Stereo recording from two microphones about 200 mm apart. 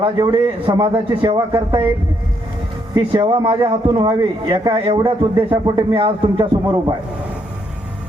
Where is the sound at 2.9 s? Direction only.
20° right (ahead or behind).